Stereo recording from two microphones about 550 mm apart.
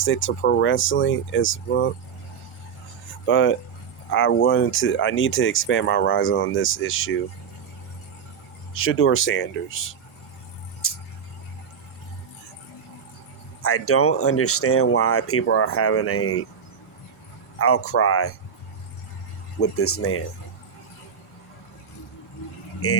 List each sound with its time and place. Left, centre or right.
0.0 s speech: left
3.2 s speech: left
8.7 s speech: left
10.8 s a sound: left
13.6 s speech: left
17.6 s speech: left
19.5 s speech: left
22.8 s speech: left